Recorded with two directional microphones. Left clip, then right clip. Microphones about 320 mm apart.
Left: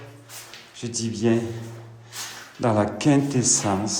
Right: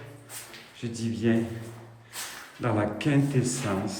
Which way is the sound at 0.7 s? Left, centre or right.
Centre.